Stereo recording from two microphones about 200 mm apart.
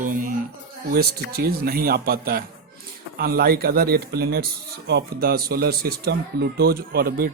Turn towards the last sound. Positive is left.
turn(degrees=-50)  # may be behind; listen again after turning